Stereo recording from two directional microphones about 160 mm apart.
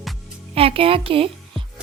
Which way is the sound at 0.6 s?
35° right (ahead or behind).